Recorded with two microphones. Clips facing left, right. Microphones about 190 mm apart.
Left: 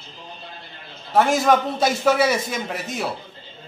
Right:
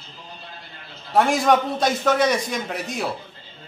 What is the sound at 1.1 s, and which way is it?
A man's voice, centre (ahead or behind).